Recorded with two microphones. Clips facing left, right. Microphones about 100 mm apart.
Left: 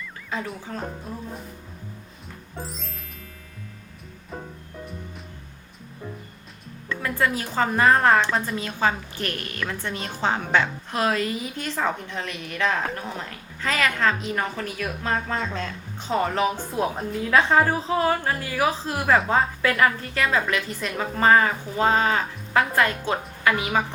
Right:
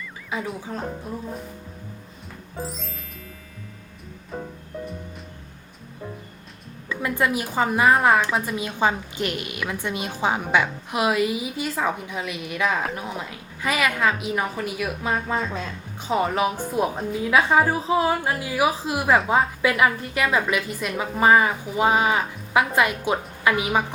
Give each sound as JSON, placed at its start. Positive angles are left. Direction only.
{"t": 0.3, "sound": "a woman's voice", "side_deg": -10}
{"t": 2.6, "sound": "music", "side_deg": 0}
{"t": 7.0, "sound": "a woman's voice", "side_deg": -15}